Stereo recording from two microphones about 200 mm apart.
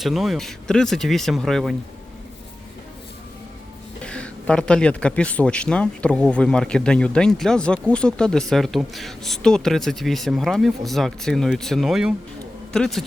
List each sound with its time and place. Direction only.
0.0 s speech: centre (ahead or behind)
4.0 s speech: 5° left (ahead or behind)